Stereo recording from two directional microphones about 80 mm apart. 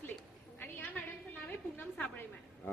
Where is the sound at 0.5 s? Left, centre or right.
Left.